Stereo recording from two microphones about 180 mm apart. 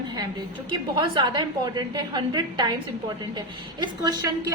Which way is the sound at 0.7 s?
25° right (ahead or behind).